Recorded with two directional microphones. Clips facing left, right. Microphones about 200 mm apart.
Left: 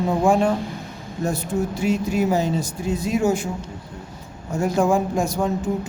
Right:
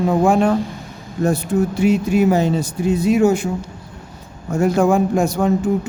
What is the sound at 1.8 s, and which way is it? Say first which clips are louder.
A man's voice: right 6 dB; 65° right (ahead or behind).